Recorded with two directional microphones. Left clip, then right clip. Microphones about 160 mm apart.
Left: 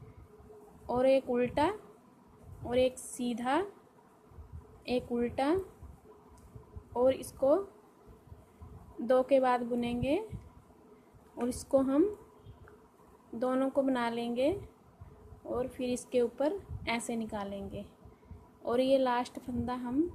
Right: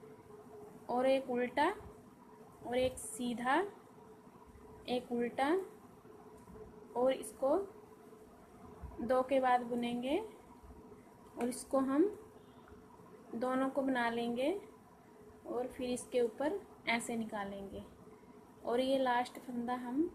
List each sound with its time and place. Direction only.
0.9 s a woman's voice: 55° left (ahead or behind)
4.9 s a woman's voice: 55° left (ahead or behind)
6.9 s a woman's voice: 50° left (ahead or behind)
9.0 s a woman's voice: 55° left (ahead or behind)
11.3 s a woman's voice: 55° left (ahead or behind)
13.4 s a woman's voice: 50° left (ahead or behind)
15.5 s a woman's voice: 55° left (ahead or behind)
18.6 s a woman's voice: 55° left (ahead or behind)